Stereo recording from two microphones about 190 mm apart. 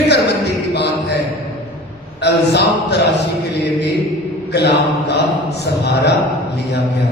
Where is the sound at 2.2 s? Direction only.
60° left (ahead or behind).